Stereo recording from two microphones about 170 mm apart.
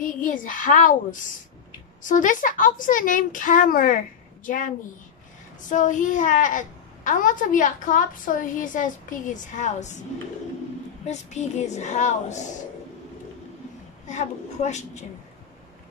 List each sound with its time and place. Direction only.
0.0 s a woman's voice: 50° left (ahead or behind)
11.1 s a woman's voice: 45° left (ahead or behind)
14.0 s a woman's voice: 45° left (ahead or behind)